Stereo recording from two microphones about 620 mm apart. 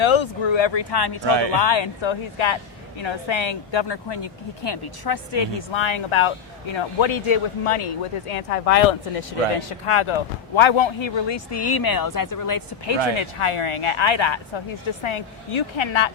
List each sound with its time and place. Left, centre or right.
0.0 s speech: left
1.2 s speech: right
1.5 s speech: left
13.1 s speech: left